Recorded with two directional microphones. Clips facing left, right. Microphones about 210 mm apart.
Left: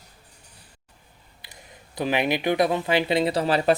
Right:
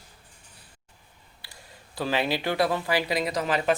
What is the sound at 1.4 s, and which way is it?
Speech, 20° left (ahead or behind).